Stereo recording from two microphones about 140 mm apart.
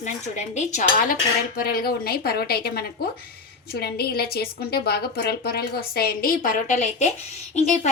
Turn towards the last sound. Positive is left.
turn(degrees=55)  # may be behind; listen again after turning